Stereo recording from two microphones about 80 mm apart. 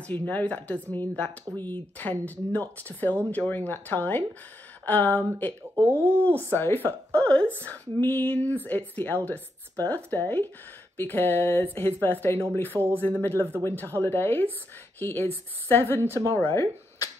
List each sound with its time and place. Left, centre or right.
0.0 s speech: centre
5.8 s speech: right
6.5 s speech: left